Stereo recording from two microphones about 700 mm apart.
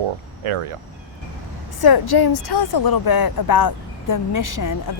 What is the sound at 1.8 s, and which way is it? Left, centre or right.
Speech, left.